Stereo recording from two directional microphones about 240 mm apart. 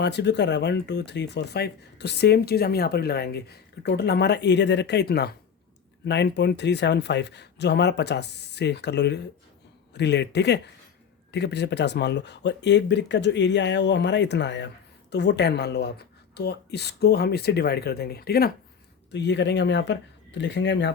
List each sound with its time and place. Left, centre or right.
0.0 s speech: left